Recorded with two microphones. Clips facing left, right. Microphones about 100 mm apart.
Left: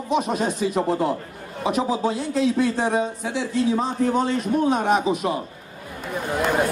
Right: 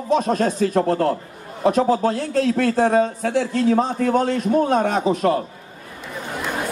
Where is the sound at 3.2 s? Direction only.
55° right (ahead or behind).